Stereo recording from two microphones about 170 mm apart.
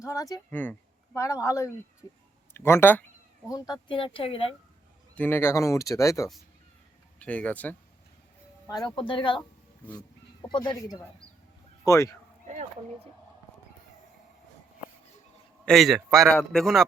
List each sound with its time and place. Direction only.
0.0 s speech: 20° left (ahead or behind)
3.5 s speech: 25° left (ahead or behind)
5.1 s speech: 10° left (ahead or behind)
8.6 s speech: 20° left (ahead or behind)
15.6 s speech: centre (ahead or behind)